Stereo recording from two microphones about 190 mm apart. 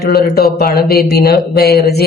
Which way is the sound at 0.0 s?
55° left (ahead or behind).